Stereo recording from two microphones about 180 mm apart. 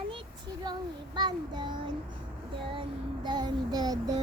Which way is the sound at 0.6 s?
25° right (ahead or behind).